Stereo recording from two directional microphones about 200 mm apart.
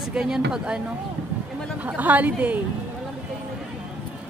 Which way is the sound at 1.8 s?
10° right (ahead or behind).